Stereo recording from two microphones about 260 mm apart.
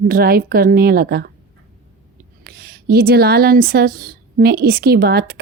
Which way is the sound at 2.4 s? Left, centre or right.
Right.